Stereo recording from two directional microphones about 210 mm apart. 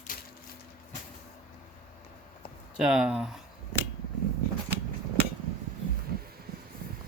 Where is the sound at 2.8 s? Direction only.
5° right (ahead or behind).